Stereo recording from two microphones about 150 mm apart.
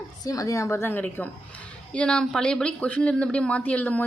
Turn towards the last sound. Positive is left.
turn(degrees=10)  # may be behind; listen again after turning